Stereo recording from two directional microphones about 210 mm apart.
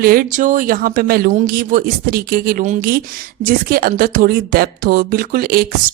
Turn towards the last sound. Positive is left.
turn(degrees=-45)  # may be behind; listen again after turning